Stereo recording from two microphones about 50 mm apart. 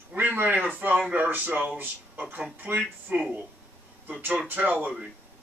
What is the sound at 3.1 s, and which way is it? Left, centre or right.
Speech, right.